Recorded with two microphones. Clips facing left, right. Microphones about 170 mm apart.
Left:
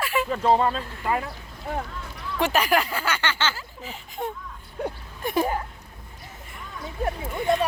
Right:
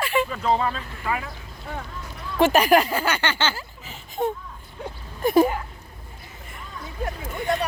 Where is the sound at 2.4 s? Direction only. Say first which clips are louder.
Right 5 dB; 45° right (ahead or behind).